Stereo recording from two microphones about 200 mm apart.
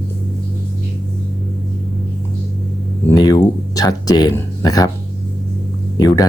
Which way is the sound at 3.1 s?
20° left (ahead or behind).